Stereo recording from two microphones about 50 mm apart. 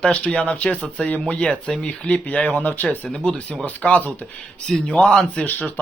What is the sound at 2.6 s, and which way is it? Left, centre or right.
Speech, left.